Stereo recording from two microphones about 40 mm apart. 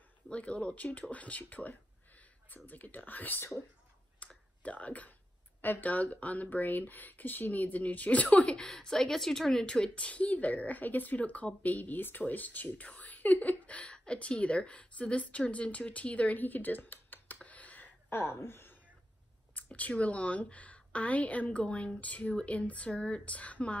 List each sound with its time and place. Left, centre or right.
0.3 s speech: left
0.7 s speech: left
4.2 s clicking: left
4.6 s speech: left
8.9 s speech: centre
9.9 s speech: left
17.4 s a sound: left
18.2 s a woman's voice: left
19.5 s a sound: left
20.0 s speech: left